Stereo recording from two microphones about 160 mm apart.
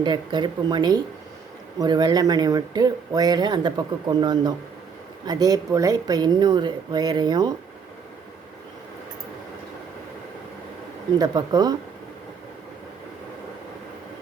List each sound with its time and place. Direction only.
0.0 s speech: 30° right (ahead or behind)
11.2 s speech: 25° right (ahead or behind)